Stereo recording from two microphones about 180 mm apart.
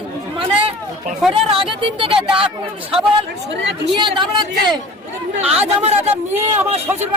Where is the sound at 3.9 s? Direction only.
25° right (ahead or behind).